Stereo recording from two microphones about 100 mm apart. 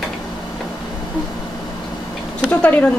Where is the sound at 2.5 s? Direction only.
10° left (ahead or behind).